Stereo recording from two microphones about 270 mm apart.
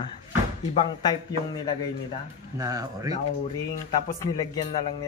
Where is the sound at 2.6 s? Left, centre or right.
Centre.